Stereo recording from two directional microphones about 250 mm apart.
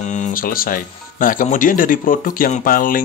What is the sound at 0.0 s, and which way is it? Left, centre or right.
Speech, left.